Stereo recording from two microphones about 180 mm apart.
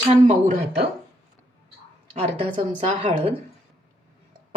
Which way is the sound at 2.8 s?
40° right (ahead or behind).